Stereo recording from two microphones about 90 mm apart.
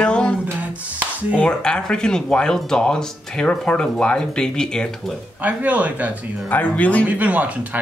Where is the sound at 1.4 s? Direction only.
10° left (ahead or behind).